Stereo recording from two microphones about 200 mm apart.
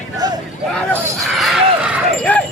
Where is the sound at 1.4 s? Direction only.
Centre (ahead or behind).